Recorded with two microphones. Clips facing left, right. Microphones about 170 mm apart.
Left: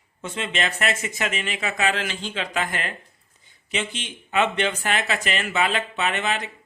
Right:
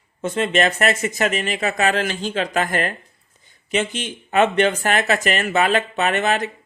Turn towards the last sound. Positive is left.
turn(degrees=-45)  # may be behind; listen again after turning